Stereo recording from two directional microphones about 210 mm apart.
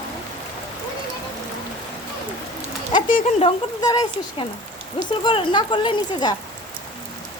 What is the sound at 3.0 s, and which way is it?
Speech, 35° left (ahead or behind).